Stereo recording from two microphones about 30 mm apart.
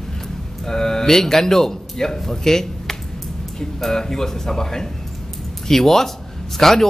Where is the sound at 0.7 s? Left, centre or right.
Centre.